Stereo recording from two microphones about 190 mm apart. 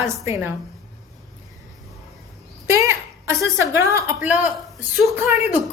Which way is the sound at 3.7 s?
15° right (ahead or behind).